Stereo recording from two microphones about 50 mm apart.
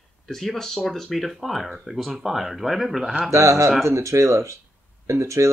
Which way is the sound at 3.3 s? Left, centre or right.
Right.